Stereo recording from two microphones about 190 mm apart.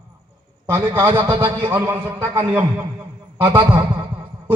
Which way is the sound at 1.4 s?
10° right (ahead or behind).